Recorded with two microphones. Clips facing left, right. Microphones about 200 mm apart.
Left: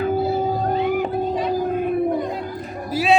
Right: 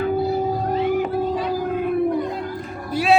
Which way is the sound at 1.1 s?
25° left (ahead or behind).